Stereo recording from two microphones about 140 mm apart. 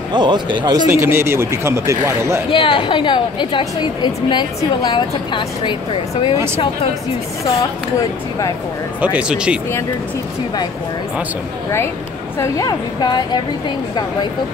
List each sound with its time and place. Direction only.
0.1 s speech: 35° right (ahead or behind)
0.9 s speech: 20° right (ahead or behind)
2.5 s a woman's voice: 35° left (ahead or behind)
6.3 s speech: 15° right (ahead or behind)
9.0 s speech: 10° right (ahead or behind)
12.4 s a woman's voice: 25° left (ahead or behind)